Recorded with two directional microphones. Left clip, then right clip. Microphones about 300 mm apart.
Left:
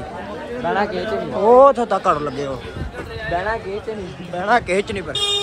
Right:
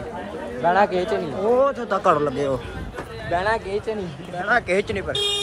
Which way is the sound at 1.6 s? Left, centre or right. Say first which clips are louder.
Left 8 dB; centre.